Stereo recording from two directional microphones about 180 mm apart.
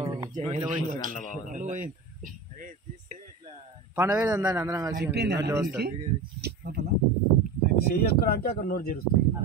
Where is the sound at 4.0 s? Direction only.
10° right (ahead or behind).